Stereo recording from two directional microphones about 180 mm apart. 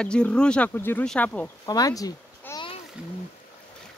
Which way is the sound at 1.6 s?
20° left (ahead or behind).